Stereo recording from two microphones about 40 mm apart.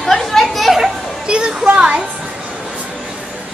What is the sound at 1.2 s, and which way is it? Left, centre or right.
Music, right.